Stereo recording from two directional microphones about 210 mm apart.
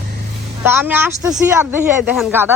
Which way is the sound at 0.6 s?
10° right (ahead or behind).